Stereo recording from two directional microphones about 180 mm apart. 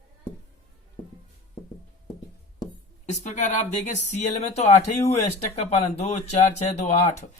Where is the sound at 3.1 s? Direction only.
40° left (ahead or behind).